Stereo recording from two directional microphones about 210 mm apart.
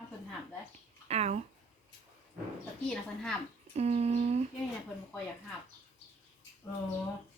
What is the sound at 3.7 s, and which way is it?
Speech, 30° right (ahead or behind).